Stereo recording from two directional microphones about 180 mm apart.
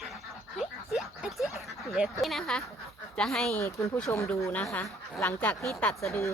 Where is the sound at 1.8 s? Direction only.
Centre (ahead or behind).